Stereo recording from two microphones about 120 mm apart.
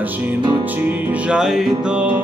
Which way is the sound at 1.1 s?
5° right (ahead or behind).